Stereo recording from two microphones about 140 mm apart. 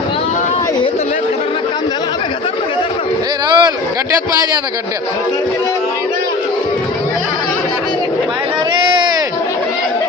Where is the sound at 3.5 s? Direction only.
30° right (ahead or behind).